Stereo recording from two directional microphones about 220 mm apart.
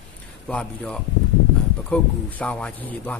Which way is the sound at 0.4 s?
5° left (ahead or behind).